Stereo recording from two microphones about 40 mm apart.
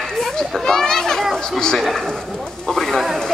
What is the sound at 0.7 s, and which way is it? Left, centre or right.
Children playing, centre.